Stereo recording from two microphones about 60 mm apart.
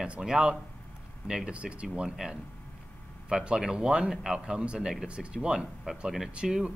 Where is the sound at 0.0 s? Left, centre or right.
Centre.